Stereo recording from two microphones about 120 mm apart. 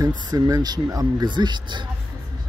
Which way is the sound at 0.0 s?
40° right (ahead or behind).